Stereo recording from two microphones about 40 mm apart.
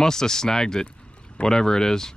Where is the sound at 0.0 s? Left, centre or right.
Centre.